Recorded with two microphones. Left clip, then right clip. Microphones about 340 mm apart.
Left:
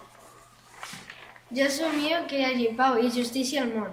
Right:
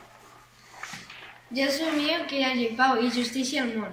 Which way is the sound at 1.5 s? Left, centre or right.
Centre.